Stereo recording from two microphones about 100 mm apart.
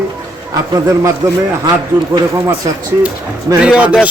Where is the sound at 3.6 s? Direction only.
10° right (ahead or behind).